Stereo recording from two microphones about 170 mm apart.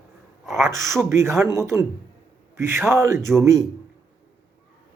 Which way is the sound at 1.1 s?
15° right (ahead or behind).